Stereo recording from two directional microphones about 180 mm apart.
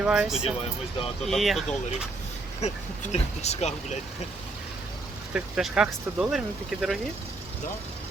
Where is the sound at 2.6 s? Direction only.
40° left (ahead or behind).